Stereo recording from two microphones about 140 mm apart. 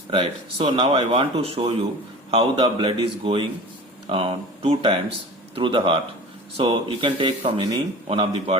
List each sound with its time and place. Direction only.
0.1 s speech: 40° right (ahead or behind)